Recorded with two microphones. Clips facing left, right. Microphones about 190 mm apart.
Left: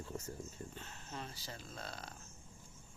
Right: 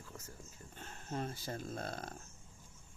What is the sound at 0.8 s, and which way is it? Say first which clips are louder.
Speech: right 11 dB; 50° right (ahead or behind).